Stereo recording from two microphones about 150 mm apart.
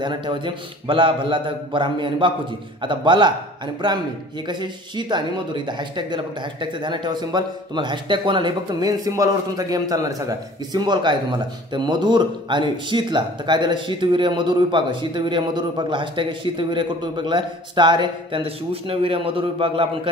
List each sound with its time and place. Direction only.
0.0 s speech: 30° right (ahead or behind)
4.5 s speech: 30° right (ahead or behind)